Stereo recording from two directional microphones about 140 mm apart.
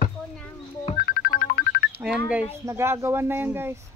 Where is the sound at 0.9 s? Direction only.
90° left.